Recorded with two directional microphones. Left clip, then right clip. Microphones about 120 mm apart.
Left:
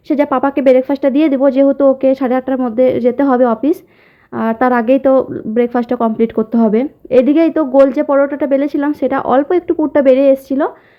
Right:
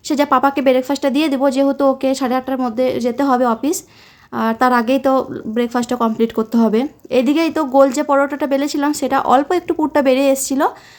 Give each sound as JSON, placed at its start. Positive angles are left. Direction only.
{"t": 0.1, "sound": "speech", "side_deg": 30}